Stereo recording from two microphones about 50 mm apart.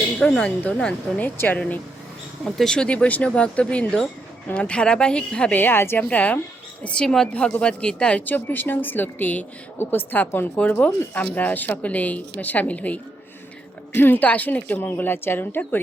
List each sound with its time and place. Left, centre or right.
0.2 s speech: centre; by 1.8 s left
2.7 s speech: left
5.5 s speech: left
6.0 s speech: left
6.8 s a woman's voice: centre
8.2 s speech: left
9.7 s speech: left
13.9 s speech: left
14.3 s speech: left
14.9 s speech: left